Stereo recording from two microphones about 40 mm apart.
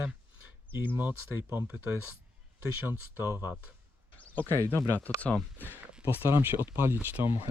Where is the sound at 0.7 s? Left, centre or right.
Right.